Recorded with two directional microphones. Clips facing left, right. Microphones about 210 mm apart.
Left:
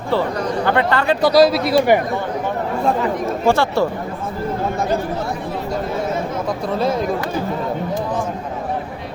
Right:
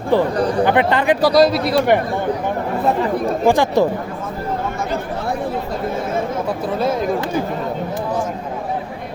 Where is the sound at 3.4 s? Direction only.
15° right (ahead or behind).